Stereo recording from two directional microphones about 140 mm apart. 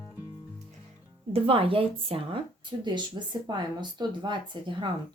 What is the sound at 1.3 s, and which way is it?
Speech, 40° right (ahead or behind).